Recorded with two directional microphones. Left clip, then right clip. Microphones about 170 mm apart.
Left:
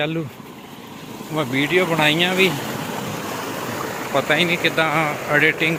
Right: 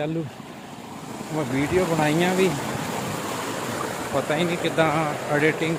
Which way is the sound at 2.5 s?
20° left (ahead or behind).